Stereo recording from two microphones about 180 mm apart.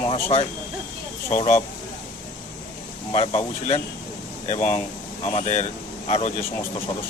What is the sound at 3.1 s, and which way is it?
Speech, 35° left (ahead or behind).